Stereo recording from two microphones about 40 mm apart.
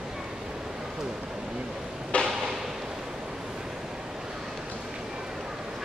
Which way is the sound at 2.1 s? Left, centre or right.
Left.